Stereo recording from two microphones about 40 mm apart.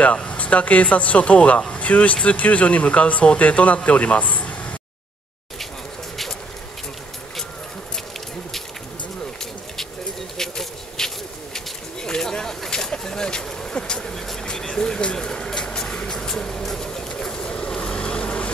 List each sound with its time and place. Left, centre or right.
0.3 s speech: left
10.3 s bee: centre
11.5 s a sound: centre
14.6 s vehicle: centre
15.1 s a sound: centre
16.1 s bird: centre